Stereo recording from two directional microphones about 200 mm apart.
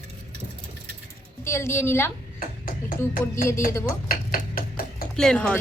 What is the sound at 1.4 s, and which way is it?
Speech, 15° left (ahead or behind).